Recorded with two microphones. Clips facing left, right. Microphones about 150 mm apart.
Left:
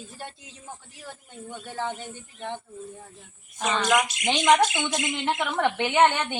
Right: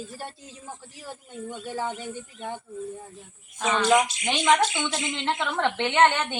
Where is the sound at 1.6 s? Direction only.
10° right (ahead or behind).